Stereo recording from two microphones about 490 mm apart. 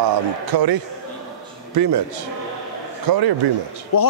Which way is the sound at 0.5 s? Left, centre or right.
Right.